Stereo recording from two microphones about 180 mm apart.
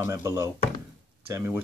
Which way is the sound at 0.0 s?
15° right (ahead or behind).